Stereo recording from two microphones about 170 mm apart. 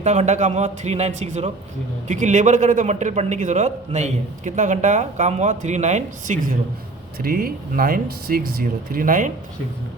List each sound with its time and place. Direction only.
0.0 s a man's voice: 40° right (ahead or behind)
7.2 s speech: 60° right (ahead or behind)